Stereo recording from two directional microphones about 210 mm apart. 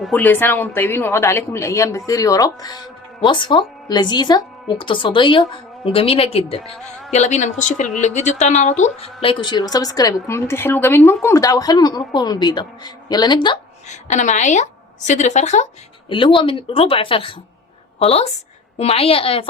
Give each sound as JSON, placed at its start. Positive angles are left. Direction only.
{"t": 0.0, "sound": "a woman's voice", "side_deg": 10}
{"t": 13.8, "sound": "a woman's voice", "side_deg": 35}